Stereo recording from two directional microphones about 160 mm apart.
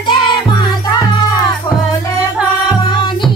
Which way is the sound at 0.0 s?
25° left (ahead or behind).